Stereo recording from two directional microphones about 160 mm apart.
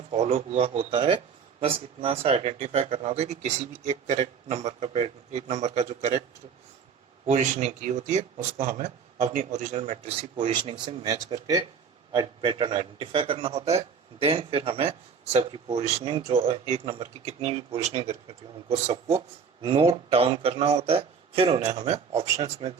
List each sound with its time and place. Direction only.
0.1 s a man's voice: 40° right (ahead or behind)
7.3 s a man's voice: 45° right (ahead or behind)
16.8 s speech: 25° right (ahead or behind)
17.2 s a man's voice: 40° right (ahead or behind)